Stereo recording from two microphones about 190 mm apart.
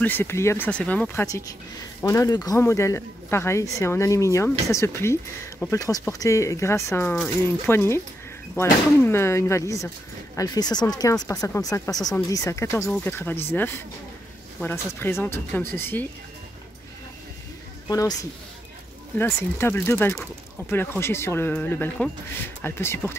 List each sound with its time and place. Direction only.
0.0 s speech: 10° left (ahead or behind)
17.8 s a woman's voice: 20° left (ahead or behind)
19.1 s speech: 10° left (ahead or behind)